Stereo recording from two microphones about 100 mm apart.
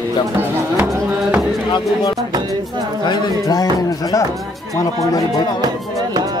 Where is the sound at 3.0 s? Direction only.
45° left (ahead or behind).